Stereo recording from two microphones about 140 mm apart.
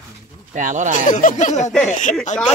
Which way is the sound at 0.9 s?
70° left (ahead or behind).